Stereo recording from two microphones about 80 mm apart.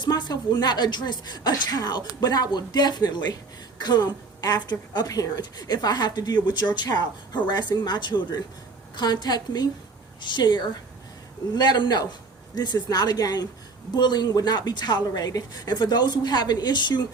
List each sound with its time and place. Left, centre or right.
0.0 s speech: left
5.0 s speech: left
7.7 s speech: left
10.2 s a woman's voice: left
13.9 s speech: left